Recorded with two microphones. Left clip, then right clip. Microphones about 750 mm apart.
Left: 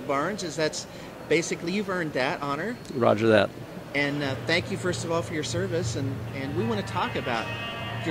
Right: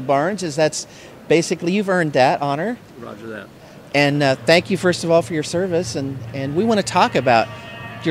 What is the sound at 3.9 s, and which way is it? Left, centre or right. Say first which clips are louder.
Speech: right 11 dB; right.